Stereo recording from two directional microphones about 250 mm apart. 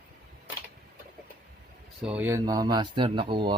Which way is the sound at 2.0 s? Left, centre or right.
Centre.